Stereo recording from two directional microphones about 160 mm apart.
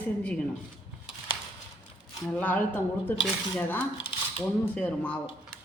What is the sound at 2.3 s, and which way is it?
Speech, 10° left (ahead or behind).